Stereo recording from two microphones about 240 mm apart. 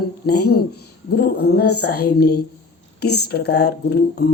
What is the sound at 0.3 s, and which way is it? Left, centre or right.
Speech, left.